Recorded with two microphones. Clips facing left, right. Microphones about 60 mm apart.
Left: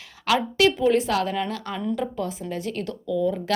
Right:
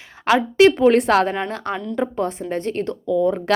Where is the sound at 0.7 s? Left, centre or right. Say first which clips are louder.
Right 6 dB; right.